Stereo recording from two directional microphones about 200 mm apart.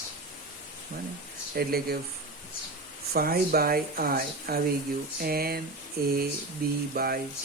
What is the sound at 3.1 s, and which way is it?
Speech, 50° right (ahead or behind).